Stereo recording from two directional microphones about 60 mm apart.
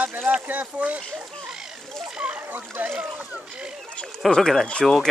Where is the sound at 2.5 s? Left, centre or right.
Right.